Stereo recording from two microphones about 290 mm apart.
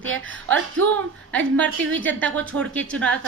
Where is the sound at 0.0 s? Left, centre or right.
Right.